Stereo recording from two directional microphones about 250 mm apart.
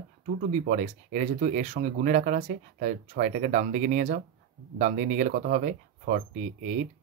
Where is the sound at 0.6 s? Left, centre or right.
Right.